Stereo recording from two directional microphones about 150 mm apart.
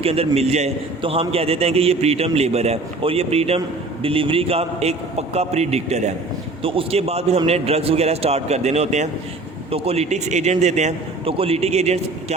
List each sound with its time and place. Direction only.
0.0 s a man's voice: 40° right (ahead or behind)